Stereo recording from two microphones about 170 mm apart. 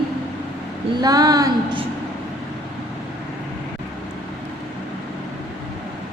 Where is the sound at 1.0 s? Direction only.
20° right (ahead or behind).